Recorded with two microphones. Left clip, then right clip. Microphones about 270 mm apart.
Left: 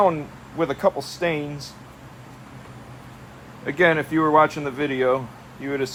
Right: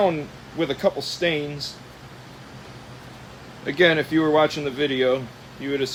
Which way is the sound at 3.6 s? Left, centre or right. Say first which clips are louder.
Even; centre.